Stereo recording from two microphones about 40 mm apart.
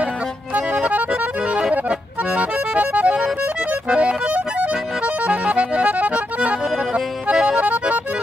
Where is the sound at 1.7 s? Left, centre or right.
Right.